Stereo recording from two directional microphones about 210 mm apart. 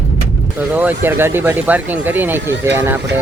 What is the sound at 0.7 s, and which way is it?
Speech, 10° right (ahead or behind).